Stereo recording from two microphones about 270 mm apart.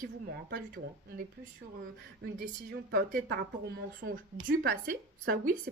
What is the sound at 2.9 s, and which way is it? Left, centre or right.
Speech, right.